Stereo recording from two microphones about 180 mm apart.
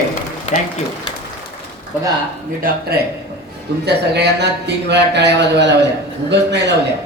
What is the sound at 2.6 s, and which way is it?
Speech, 60° right (ahead or behind).